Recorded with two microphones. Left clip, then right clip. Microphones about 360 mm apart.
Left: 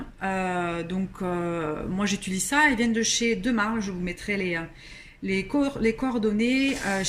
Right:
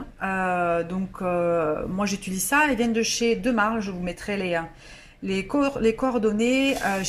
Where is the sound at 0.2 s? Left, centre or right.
Centre.